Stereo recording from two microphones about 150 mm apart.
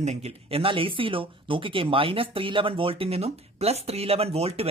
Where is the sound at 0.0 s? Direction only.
45° right (ahead or behind).